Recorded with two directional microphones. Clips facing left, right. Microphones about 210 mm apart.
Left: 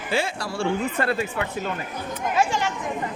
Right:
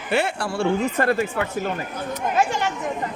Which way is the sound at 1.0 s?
45° right (ahead or behind).